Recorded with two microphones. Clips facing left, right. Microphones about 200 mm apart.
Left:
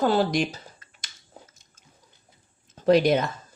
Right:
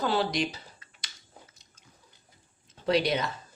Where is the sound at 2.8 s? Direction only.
45° left (ahead or behind).